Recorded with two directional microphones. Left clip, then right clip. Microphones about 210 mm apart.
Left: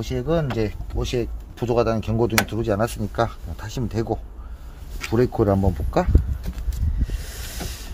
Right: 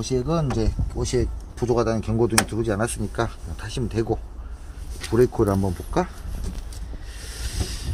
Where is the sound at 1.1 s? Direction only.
30° left (ahead or behind); by 4.2 s 50° left (ahead or behind).